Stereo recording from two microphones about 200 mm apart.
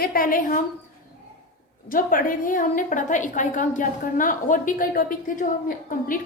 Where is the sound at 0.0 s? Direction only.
45° left (ahead or behind).